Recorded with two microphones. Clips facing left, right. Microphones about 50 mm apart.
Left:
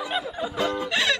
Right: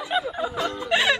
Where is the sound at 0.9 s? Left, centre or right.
Centre.